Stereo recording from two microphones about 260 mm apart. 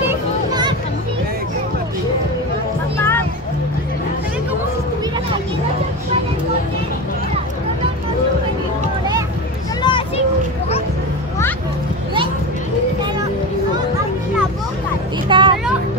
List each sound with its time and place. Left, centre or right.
0.1 s vehicle: centre
3.0 s music: centre
9.8 s a sound: centre
15.2 s vehicle: centre